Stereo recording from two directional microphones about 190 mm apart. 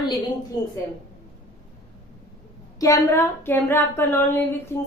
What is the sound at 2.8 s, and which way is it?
A woman's voice, 15° left (ahead or behind).